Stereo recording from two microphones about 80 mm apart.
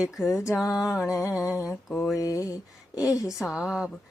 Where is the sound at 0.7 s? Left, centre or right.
Left.